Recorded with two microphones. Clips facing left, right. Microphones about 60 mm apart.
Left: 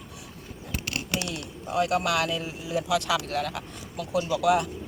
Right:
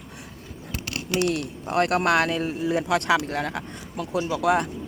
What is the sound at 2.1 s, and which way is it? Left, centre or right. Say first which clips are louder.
Speech: right 5 dB; right.